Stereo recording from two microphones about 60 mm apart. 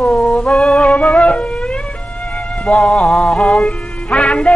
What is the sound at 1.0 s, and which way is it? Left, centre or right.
Wind instrument, centre.